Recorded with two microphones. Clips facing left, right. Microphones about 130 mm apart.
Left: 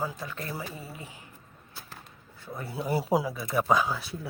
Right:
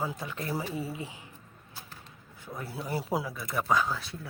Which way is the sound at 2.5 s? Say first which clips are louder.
Left 3 dB; centre (ahead or behind).